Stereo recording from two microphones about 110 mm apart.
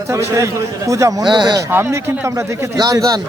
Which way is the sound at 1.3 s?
40° right (ahead or behind).